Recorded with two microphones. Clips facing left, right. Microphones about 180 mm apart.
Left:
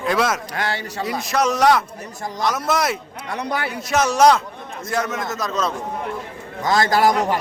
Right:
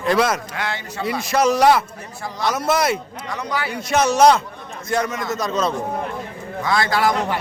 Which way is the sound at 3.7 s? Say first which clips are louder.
Right 3 dB; centre (ahead or behind).